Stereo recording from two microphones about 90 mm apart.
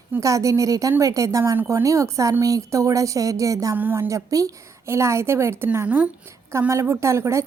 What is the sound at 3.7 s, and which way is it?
A woman's voice, 20° right (ahead or behind).